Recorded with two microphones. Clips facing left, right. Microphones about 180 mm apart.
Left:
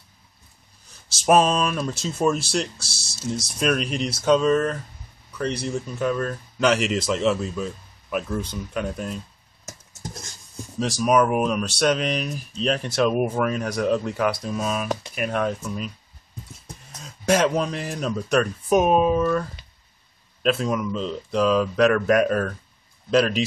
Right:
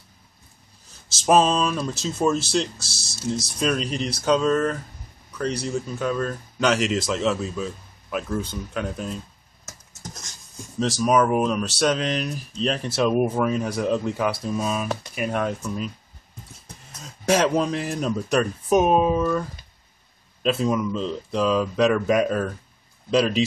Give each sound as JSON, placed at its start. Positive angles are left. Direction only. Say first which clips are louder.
{"t": 1.2, "sound": "speech", "louder": "even", "side_deg": 5}
{"t": 9.7, "sound": "a sound", "louder": "left 3 dB", "side_deg": 30}
{"t": 10.8, "sound": "speech", "louder": "even", "side_deg": 10}
{"t": 17.0, "sound": "speech", "louder": "even", "side_deg": 0}
{"t": 20.4, "sound": "speech", "louder": "right 1 dB", "side_deg": -5}